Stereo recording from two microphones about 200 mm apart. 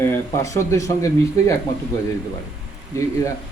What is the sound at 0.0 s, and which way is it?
Speech, 15° left (ahead or behind).